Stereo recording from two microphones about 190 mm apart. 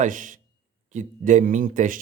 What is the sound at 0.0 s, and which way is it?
Speech, 45° right (ahead or behind).